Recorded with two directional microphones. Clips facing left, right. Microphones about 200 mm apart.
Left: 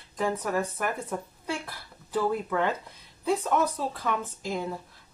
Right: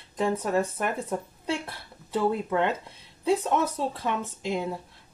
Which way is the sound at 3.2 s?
25° right (ahead or behind).